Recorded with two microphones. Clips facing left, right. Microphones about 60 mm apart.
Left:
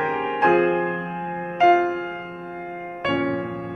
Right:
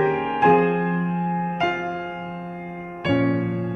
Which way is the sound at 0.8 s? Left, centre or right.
Centre.